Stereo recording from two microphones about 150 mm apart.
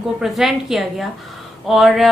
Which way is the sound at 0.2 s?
Centre (ahead or behind).